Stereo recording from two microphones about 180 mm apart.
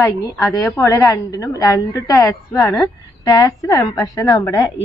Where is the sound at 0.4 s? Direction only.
15° left (ahead or behind).